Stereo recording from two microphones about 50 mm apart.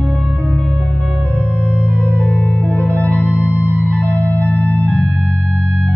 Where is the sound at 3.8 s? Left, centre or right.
Left.